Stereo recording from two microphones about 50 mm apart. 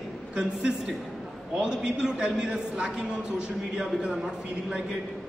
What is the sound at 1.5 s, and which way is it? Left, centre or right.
A man's voice, centre.